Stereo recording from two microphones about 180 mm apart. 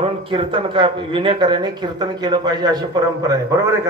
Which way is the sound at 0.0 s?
30° right (ahead or behind).